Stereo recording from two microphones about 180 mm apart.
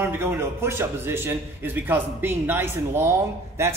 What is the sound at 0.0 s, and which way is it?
A man's voice, 10° right (ahead or behind).